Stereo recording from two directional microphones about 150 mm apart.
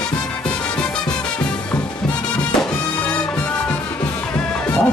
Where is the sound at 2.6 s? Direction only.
5° left (ahead or behind).